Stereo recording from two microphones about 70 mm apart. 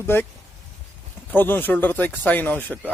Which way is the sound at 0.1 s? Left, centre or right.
Left.